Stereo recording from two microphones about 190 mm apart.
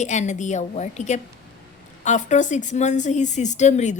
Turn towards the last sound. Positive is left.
turn(degrees=40)  # may be behind; listen again after turning